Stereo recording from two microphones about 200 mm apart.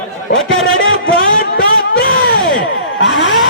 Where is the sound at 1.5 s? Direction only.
50° left (ahead or behind).